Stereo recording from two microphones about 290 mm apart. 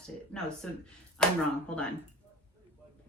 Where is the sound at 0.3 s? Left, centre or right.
Centre.